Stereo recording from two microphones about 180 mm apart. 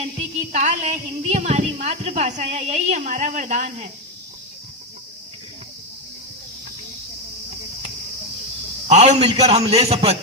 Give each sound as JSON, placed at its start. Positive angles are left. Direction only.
{"t": 0.5, "sound": "a woman's voice", "side_deg": -40}
{"t": 8.9, "sound": "a woman's voice", "side_deg": -40}